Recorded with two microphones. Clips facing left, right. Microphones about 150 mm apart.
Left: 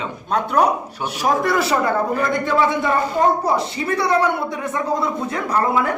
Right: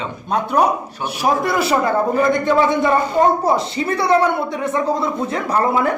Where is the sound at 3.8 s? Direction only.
25° right (ahead or behind).